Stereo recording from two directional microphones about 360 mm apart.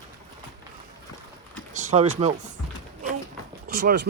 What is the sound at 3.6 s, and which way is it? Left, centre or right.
Speech, right.